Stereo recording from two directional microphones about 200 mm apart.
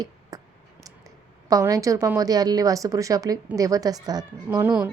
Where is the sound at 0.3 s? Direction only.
20° right (ahead or behind).